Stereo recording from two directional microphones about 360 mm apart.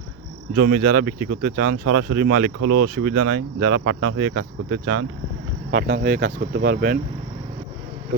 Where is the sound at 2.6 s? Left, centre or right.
Right.